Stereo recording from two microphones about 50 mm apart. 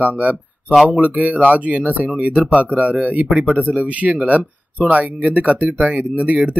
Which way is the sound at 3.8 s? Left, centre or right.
Right.